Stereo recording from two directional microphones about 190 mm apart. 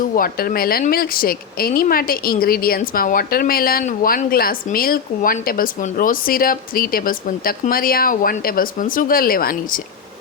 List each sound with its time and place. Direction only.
0.0 s a woman's voice: 50° left (ahead or behind)